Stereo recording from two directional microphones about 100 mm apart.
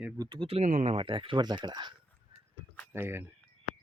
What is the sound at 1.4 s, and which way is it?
Speech, 45° right (ahead or behind).